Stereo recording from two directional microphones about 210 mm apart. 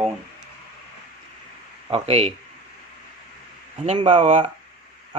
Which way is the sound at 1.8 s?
30° right (ahead or behind).